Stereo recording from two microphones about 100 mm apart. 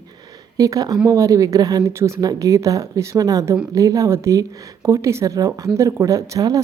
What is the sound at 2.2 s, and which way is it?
A woman's voice, 40° right (ahead or behind).